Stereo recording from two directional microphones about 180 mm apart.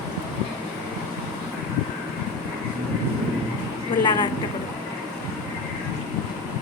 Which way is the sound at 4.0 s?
25° left (ahead or behind).